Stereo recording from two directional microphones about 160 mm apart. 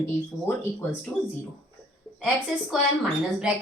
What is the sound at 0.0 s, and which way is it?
Speech, 15° left (ahead or behind).